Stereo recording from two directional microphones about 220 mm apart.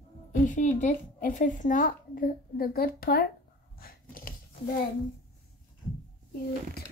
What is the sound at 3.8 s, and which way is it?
Dog, 40° left (ahead or behind).